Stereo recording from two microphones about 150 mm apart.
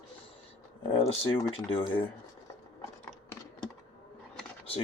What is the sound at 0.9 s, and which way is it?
Speech, 35° left (ahead or behind).